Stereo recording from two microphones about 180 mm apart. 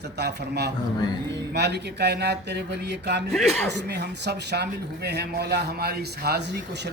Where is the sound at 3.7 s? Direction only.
70° right (ahead or behind).